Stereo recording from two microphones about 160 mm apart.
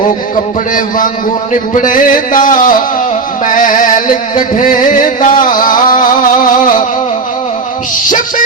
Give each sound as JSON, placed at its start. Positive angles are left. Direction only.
{"t": 0.7, "sound": "music", "side_deg": 55}